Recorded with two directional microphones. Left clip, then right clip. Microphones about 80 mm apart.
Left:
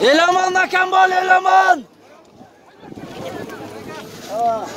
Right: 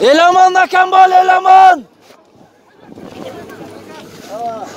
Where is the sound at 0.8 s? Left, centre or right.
Right.